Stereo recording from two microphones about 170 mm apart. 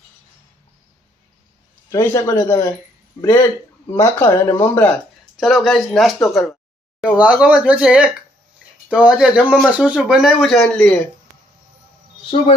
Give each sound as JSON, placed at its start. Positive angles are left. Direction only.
{"t": 1.9, "sound": "a man's voice", "side_deg": 15}
{"t": 5.4, "sound": "speech", "side_deg": 0}
{"t": 12.2, "sound": "speech", "side_deg": 30}